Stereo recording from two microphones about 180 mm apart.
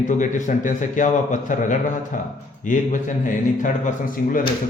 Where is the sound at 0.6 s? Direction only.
45° left (ahead or behind).